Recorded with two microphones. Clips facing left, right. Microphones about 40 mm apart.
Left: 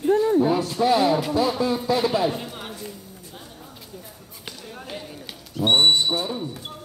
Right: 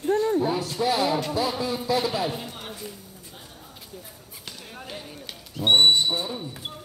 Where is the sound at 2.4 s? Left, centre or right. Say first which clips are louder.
Left 3 dB; centre.